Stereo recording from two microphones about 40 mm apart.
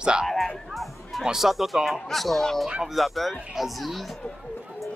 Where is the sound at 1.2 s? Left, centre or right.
Centre.